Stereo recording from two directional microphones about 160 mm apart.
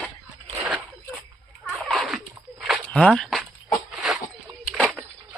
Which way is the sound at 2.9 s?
5° left (ahead or behind).